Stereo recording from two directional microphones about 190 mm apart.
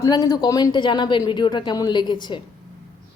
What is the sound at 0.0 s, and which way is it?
Speech, 20° left (ahead or behind).